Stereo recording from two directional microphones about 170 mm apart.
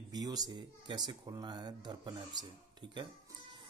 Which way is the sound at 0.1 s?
20° right (ahead or behind).